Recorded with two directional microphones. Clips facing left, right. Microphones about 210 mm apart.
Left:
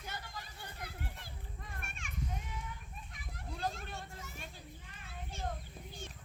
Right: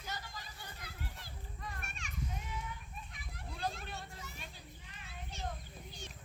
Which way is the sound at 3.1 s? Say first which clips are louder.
Left 2 dB; 45° left (ahead or behind).